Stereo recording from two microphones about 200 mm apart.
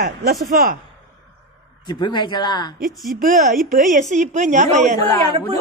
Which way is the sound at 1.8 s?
20° left (ahead or behind).